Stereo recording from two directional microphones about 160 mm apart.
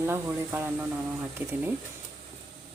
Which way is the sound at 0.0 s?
15° right (ahead or behind).